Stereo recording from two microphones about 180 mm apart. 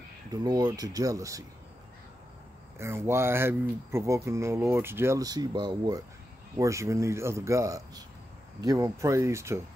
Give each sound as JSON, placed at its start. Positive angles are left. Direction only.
{"t": 0.3, "sound": "speech", "side_deg": -20}
{"t": 2.8, "sound": "speech", "side_deg": -15}